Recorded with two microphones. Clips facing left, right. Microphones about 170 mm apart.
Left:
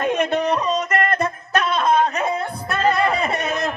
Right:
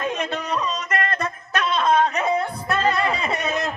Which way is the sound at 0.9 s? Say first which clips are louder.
Left 5 dB; 45° left (ahead or behind).